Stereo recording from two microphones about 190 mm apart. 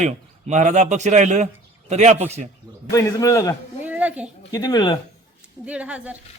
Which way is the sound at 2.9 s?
15° left (ahead or behind).